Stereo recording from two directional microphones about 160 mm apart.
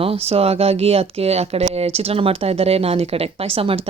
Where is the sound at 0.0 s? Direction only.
35° right (ahead or behind).